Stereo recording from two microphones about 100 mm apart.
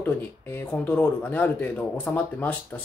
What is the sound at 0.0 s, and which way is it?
Speech, 20° left (ahead or behind).